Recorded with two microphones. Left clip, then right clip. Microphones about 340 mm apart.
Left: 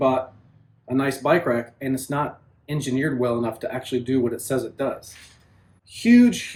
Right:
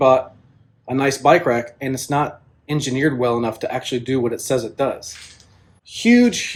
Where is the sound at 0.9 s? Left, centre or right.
Centre.